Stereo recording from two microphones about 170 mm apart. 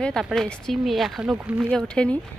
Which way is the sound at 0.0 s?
Centre (ahead or behind).